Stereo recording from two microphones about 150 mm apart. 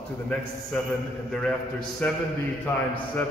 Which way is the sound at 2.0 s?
10° left (ahead or behind).